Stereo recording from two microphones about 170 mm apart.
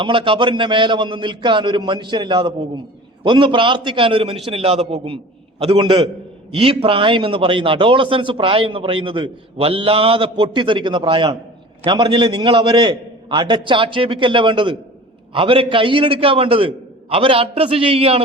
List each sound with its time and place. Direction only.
0.0 s a man's voice: 30° right (ahead or behind)